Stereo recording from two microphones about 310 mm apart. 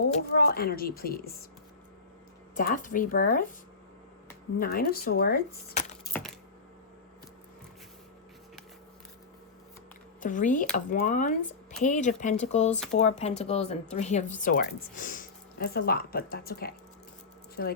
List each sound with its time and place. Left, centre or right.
0.0 s speech: left
2.6 s speech: left
4.5 s speech: left
10.2 s speech: left